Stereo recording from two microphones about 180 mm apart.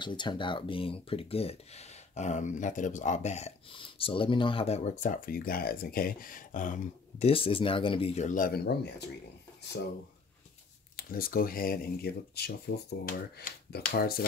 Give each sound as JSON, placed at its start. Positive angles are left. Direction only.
{"t": 0.0, "sound": "speech", "side_deg": 25}
{"t": 11.0, "sound": "speech", "side_deg": 55}